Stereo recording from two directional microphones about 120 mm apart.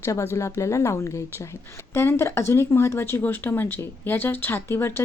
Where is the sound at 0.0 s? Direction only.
25° left (ahead or behind).